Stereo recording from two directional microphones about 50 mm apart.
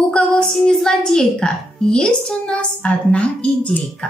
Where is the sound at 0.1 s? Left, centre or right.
Centre.